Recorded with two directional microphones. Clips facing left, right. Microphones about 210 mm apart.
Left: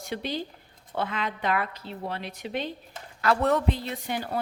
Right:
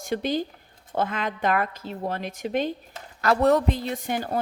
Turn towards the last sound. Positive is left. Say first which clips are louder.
# right 3 dB
turn(degrees=-45)  # may be behind; listen again after turning